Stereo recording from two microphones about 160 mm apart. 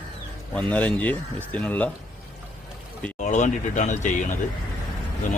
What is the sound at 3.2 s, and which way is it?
Speech, 50° left (ahead or behind).